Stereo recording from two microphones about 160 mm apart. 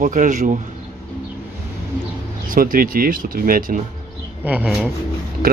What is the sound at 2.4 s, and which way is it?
Speech, 60° right (ahead or behind).